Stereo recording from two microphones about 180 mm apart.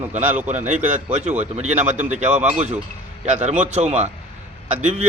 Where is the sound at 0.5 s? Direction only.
40° right (ahead or behind).